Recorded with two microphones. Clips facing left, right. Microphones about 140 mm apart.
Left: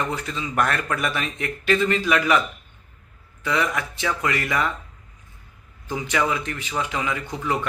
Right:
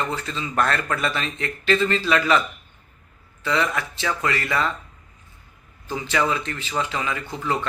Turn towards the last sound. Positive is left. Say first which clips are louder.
# even
turn(degrees=15)  # may be behind; listen again after turning